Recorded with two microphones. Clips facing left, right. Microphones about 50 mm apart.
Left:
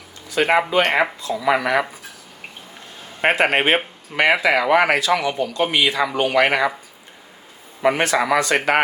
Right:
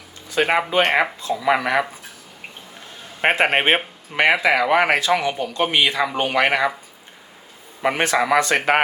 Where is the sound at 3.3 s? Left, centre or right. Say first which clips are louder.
Even; right.